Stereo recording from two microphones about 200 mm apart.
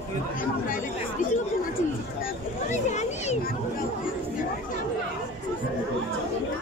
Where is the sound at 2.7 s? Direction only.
35° left (ahead or behind).